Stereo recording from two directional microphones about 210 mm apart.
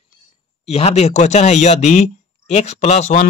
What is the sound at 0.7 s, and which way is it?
Speech, 30° left (ahead or behind).